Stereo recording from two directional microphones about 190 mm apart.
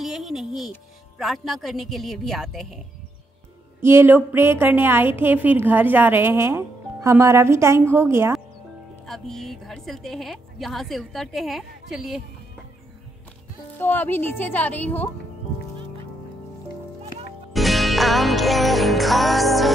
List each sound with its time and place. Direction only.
0.0 s speech: centre (ahead or behind)
3.8 s a woman's voice: 10° right (ahead or behind)
9.0 s speech: centre (ahead or behind)
13.7 s a woman's voice: 10° left (ahead or behind)
17.5 s music: centre (ahead or behind)